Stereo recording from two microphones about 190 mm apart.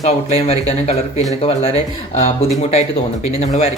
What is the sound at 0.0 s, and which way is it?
Speech, 35° left (ahead or behind).